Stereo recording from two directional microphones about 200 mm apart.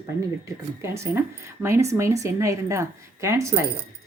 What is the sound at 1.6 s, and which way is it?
A woman's voice, 15° right (ahead or behind).